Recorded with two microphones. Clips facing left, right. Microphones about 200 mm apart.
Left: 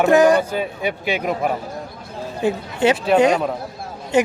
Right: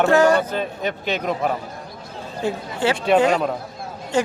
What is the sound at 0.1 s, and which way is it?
A man's voice, 15° left (ahead or behind).